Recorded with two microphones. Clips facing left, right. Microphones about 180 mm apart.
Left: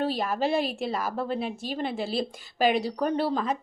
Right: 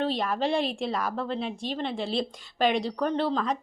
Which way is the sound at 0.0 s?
5° left (ahead or behind).